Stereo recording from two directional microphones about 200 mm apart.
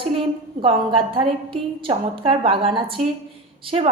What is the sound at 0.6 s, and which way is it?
A woman's voice, 25° right (ahead or behind).